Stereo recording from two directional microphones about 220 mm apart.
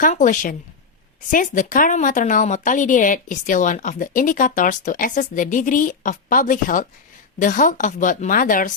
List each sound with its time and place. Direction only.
0.0 s a woman's voice: 35° left (ahead or behind)